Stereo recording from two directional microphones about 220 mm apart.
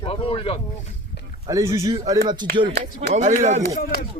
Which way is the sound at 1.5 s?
15° right (ahead or behind).